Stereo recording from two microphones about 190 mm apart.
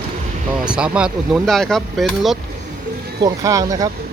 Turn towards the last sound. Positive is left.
turn(degrees=-20)  # may be behind; listen again after turning